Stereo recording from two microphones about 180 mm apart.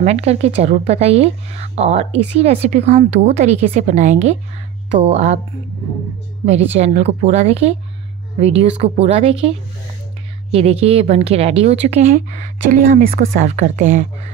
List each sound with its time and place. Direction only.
0.0 s a woman's voice: 35° right (ahead or behind)
6.4 s a woman's voice: 35° right (ahead or behind)
10.5 s a woman's voice: 35° right (ahead or behind)
12.1 s a woman's voice: 45° right (ahead or behind)